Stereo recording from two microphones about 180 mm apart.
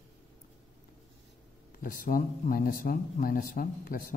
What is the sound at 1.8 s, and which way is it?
Speech, 50° left (ahead or behind).